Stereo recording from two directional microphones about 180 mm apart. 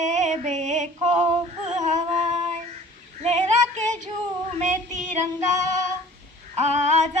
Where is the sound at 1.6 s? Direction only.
40° right (ahead or behind).